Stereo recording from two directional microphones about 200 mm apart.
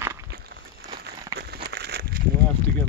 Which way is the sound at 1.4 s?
55° right (ahead or behind).